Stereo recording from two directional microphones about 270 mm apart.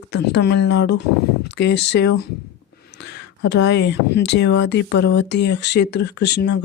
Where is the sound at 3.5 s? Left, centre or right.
Left.